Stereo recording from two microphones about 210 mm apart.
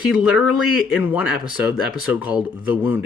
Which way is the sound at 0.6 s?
90° left.